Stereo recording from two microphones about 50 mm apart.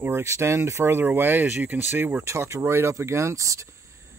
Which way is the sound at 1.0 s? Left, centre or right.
Right.